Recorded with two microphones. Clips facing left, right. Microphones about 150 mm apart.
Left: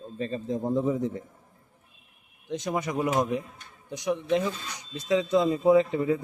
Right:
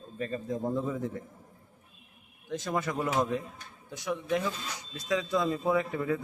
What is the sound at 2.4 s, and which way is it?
Speech, 20° left (ahead or behind).